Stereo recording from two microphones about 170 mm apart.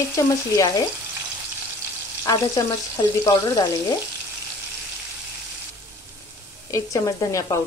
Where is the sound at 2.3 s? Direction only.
20° left (ahead or behind).